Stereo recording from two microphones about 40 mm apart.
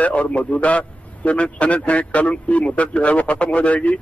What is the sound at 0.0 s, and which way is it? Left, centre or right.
A man's voice, left.